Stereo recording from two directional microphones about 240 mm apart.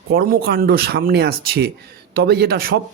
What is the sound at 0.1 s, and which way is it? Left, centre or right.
Speech, right.